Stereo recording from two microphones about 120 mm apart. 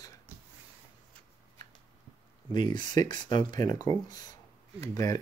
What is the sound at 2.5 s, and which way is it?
Speech, 40° left (ahead or behind).